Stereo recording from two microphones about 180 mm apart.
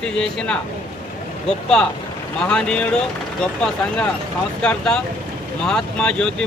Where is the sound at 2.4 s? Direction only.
5° left (ahead or behind).